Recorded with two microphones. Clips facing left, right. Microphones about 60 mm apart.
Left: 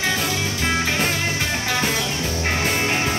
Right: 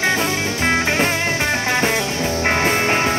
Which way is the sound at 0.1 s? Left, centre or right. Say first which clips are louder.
Right 4 dB; right.